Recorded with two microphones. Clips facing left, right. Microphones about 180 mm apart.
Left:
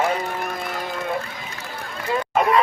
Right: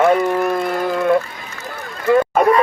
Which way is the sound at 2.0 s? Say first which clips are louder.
Right 8 dB; 60° right (ahead or behind).